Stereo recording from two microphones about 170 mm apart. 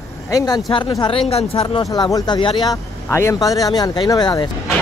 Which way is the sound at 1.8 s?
20° left (ahead or behind).